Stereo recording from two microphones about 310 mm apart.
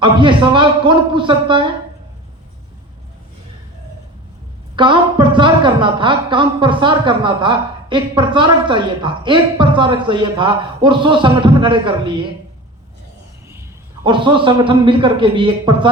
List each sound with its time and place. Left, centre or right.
0.0 s a woman's voice: centre
4.8 s a woman's voice: centre
13.5 s a man's voice: centre